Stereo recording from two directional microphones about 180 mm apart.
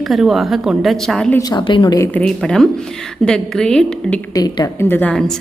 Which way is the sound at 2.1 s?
5° left (ahead or behind).